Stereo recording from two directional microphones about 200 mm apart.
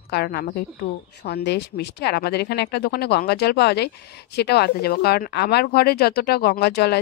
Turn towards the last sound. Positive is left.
turn(degrees=55)  # may be behind; listen again after turning